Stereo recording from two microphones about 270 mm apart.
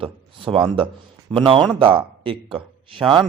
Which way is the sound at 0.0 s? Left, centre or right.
Centre.